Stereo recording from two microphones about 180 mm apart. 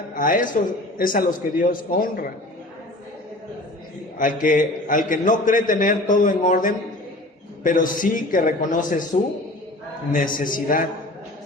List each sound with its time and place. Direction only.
0.1 s a man's voice: 50° left (ahead or behind)
4.2 s a man's voice: 50° left (ahead or behind)
10.1 s a man's voice: 50° left (ahead or behind)